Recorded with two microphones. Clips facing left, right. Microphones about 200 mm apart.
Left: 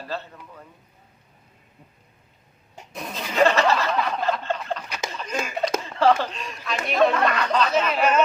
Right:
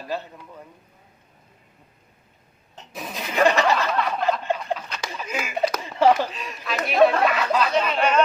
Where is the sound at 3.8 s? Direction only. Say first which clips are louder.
Right 1 dB; centre (ahead or behind).